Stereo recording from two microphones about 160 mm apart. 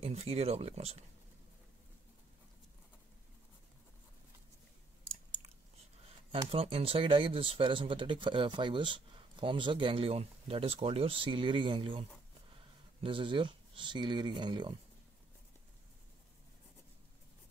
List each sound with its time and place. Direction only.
0.0 s speech: 40° right (ahead or behind)
6.3 s speech: 35° right (ahead or behind)